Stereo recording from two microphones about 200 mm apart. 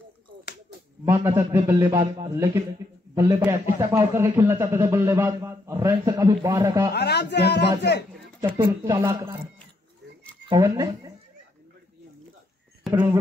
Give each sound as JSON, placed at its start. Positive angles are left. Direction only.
{"t": 1.0, "sound": "a man's voice", "side_deg": -15}
{"t": 6.9, "sound": "speech", "side_deg": 55}
{"t": 8.6, "sound": "a man's voice", "side_deg": -15}
{"t": 10.5, "sound": "speech", "side_deg": -20}
{"t": 12.8, "sound": "speech", "side_deg": -10}